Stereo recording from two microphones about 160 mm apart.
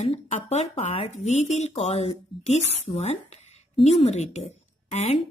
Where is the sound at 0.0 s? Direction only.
45° left (ahead or behind).